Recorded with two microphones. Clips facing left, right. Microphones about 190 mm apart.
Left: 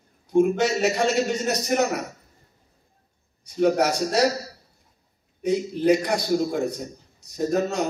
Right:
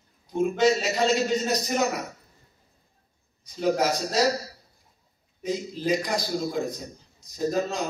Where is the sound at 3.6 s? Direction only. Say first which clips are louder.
Left 4 dB; 65° left (ahead or behind).